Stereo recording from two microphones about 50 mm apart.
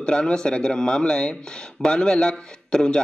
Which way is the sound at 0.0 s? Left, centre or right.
Centre.